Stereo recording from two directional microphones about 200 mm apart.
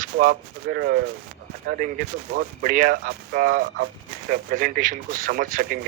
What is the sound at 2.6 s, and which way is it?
Speech, 40° right (ahead or behind).